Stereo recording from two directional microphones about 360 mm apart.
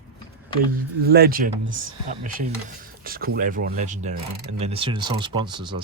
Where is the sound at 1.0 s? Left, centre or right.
Right.